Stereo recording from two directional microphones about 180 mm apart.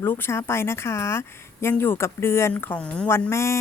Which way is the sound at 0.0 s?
10° left (ahead or behind).